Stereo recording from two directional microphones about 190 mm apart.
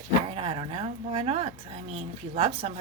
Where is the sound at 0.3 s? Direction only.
30° right (ahead or behind).